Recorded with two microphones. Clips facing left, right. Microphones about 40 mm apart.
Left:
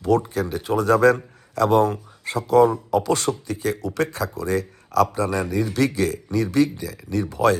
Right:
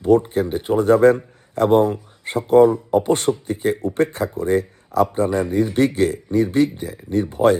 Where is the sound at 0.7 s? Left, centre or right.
Left.